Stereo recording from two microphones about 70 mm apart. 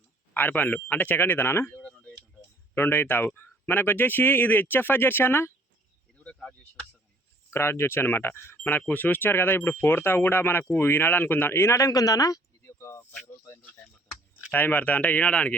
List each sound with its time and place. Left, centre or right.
0.3 s speech: left
1.8 s a sound: centre
2.7 s speech: left
6.1 s insect: centre
7.5 s speech: left
14.5 s speech: left